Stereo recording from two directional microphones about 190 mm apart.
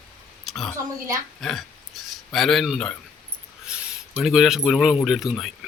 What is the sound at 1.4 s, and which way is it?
Speech, centre (ahead or behind).